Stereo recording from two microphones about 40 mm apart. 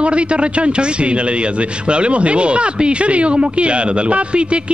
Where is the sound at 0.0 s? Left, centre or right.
Right.